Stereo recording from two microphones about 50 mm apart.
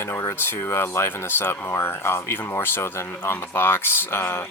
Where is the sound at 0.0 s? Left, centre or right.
Left.